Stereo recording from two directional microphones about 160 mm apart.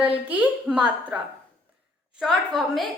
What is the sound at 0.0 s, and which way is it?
Speech, 5° right (ahead or behind).